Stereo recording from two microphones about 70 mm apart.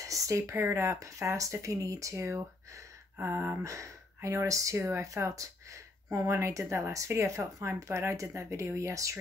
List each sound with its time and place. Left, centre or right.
0.0 s speech: right